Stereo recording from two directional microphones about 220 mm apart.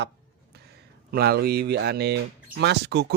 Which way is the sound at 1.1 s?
45° right (ahead or behind).